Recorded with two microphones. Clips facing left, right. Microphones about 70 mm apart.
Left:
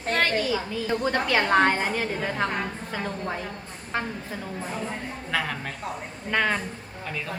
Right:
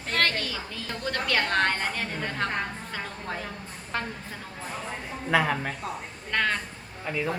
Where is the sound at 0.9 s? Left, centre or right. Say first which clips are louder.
Left 4 dB; centre.